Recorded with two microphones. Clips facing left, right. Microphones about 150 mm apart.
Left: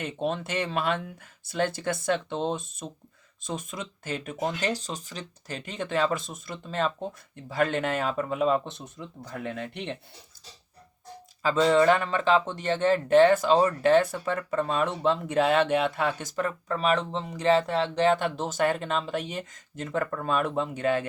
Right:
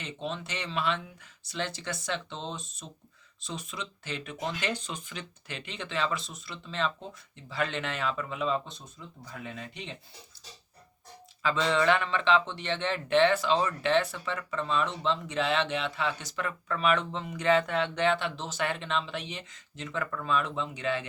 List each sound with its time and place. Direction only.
0.0 s speech: 55° left (ahead or behind)
11.4 s speech: 40° left (ahead or behind)